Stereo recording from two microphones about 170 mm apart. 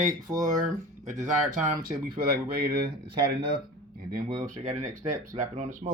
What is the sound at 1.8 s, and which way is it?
Speech, 65° right (ahead or behind).